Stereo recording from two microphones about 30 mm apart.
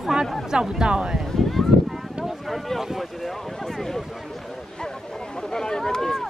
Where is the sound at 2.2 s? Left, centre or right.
Centre.